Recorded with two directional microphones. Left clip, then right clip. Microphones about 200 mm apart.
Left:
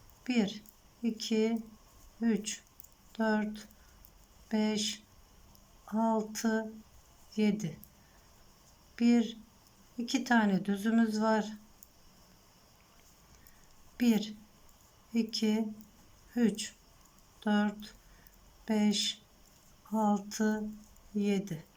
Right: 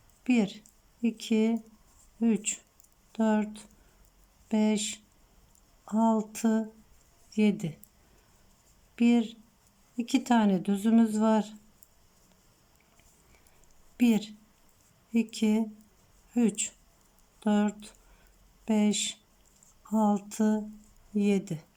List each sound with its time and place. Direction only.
0.3 s speech: 15° right (ahead or behind)
9.0 s speech: 15° right (ahead or behind)
13.9 s a woman's voice: 15° right (ahead or behind)